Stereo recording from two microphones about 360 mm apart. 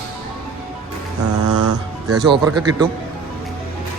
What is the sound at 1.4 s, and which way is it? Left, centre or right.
Music, right.